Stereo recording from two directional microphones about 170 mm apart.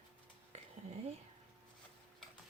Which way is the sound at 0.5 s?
40° right (ahead or behind).